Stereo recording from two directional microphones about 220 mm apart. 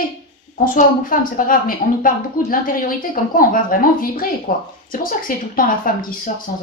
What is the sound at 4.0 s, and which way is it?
Speech, 40° left (ahead or behind).